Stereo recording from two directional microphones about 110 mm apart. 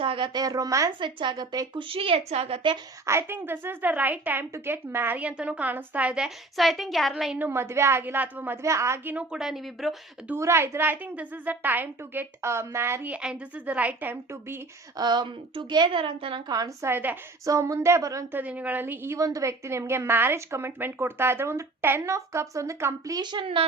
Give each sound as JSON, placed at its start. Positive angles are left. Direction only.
{"t": 0.0, "sound": "a sound", "side_deg": -55}
{"t": 0.3, "sound": "a woman's voice", "side_deg": -35}
{"t": 0.9, "sound": "a woman's voice", "side_deg": -45}
{"t": 3.1, "sound": "a woman's voice", "side_deg": -20}
{"t": 7.3, "sound": "a woman's voice", "side_deg": -20}
{"t": 9.1, "sound": "speech", "side_deg": -5}
{"t": 10.3, "sound": "a woman's voice", "side_deg": -25}
{"t": 13.1, "sound": "a woman's voice", "side_deg": -10}
{"t": 14.9, "sound": "a woman's voice", "side_deg": -40}
{"t": 16.5, "sound": "a woman's voice", "side_deg": -35}
{"t": 16.8, "sound": "a woman's voice", "side_deg": -20}
{"t": 17.4, "sound": "a woman's voice", "side_deg": -30}
{"t": 18.3, "sound": "a woman's voice", "side_deg": -15}